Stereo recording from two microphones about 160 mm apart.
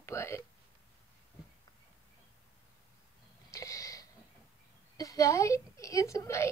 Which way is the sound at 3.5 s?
20° left (ahead or behind).